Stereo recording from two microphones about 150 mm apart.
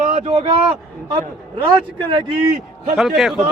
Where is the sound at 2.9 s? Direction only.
Centre (ahead or behind).